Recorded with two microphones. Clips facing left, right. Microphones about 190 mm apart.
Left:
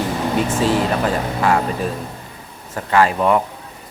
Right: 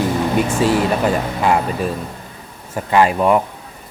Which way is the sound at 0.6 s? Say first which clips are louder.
Right 2 dB; 15° right (ahead or behind).